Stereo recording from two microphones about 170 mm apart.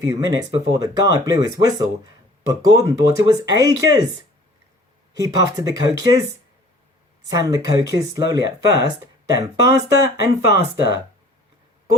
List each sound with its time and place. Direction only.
0.0 s speech: 20° right (ahead or behind)
5.1 s speech: 20° right (ahead or behind)
7.3 s speech: 20° right (ahead or behind)